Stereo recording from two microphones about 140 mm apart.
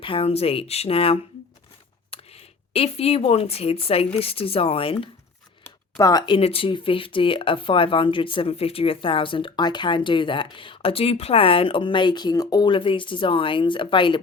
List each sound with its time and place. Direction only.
0.0 s speech: 40° left (ahead or behind)
5.6 s speech: 25° left (ahead or behind)